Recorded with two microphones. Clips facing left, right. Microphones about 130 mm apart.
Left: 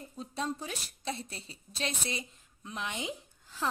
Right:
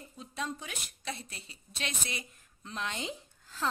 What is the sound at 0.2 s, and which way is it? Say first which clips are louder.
A woman's voice: left 3 dB; 30° left (ahead or behind).